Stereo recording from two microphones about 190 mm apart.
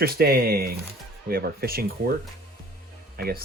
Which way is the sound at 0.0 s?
55° right (ahead or behind).